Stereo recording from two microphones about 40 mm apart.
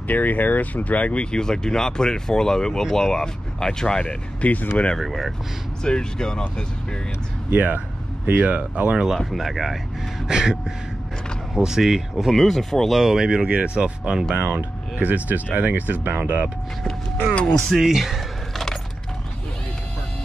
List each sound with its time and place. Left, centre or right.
0.1 s speech: left; by 4.0 s centre
4.0 s speech: left
4.9 s speech: centre
5.9 s speech: centre
7.5 s speech: right
9.3 s speech: centre
10.2 s speech: centre
12.4 s speech: centre
13.0 s speech: centre
13.5 s speech: right
14.3 s speech: right
17.2 s speech: left
17.6 s speech: centre